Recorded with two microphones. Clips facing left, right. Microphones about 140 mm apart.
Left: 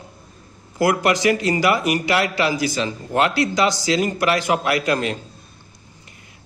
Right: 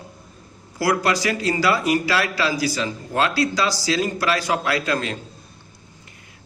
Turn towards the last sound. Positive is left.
turn(degrees=20)  # may be behind; listen again after turning